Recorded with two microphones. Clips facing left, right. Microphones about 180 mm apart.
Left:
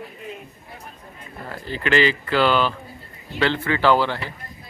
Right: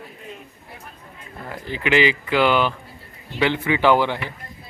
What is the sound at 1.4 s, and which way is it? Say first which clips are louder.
Speech: right 1 dB; 15° right (ahead or behind).